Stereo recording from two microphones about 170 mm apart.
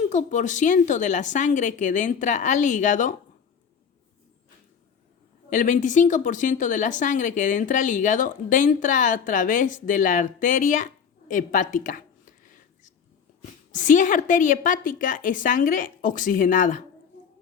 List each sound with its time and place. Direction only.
0.0 s speech: 45° left (ahead or behind)
5.5 s speech: 50° left (ahead or behind)
11.3 s a sound: 50° left (ahead or behind)
13.7 s speech: 50° left (ahead or behind)